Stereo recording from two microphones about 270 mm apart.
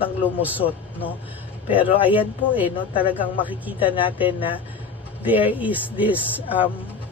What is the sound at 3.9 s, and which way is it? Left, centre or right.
Speech, centre.